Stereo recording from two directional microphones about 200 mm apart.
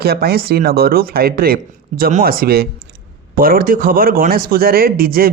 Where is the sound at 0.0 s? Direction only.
50° right (ahead or behind).